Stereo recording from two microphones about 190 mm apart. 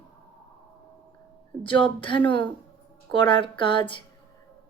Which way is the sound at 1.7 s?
25° left (ahead or behind).